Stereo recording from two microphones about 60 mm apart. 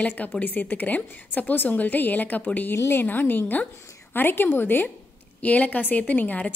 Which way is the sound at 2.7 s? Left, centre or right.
Left.